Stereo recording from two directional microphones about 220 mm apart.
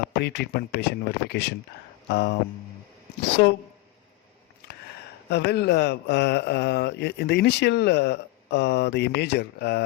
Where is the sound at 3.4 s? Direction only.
50° left (ahead or behind).